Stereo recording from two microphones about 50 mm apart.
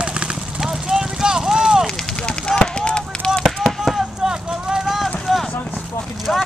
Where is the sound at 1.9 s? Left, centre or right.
Centre.